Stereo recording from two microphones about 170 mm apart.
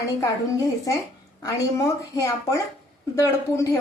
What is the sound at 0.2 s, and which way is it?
A woman's voice, 20° left (ahead or behind).